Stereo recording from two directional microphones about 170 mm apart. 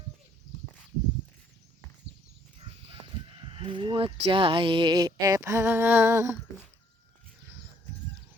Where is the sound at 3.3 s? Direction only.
30° right (ahead or behind); by 6.3 s 15° right (ahead or behind).